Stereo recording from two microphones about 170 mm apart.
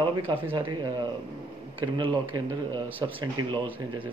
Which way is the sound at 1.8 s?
25° right (ahead or behind).